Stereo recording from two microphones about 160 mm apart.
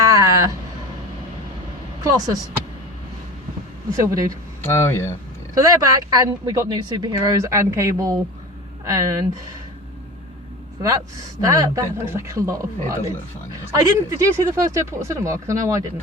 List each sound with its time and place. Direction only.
0.0 s a sound: 20° right (ahead or behind)
2.0 s speech: 20° right (ahead or behind)
3.9 s speech: 20° right (ahead or behind)
4.6 s speech: 15° left (ahead or behind)
5.5 s speech: 20° right (ahead or behind)
11.3 s speech: 20° right (ahead or behind)